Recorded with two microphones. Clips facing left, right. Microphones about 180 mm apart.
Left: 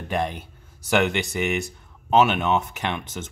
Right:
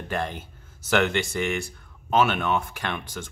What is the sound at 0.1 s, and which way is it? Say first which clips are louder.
Speech: left 4 dB; 15° left (ahead or behind).